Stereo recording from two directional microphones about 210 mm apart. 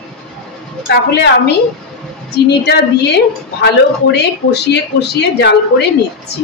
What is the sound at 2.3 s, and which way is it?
A woman's voice, 50° left (ahead or behind).